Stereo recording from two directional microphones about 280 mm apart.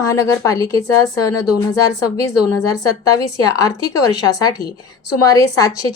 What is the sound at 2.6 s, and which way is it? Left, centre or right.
Speech, centre.